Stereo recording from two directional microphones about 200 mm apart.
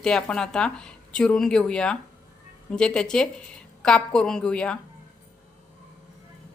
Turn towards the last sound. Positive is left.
turn(degrees=5)  # may be behind; listen again after turning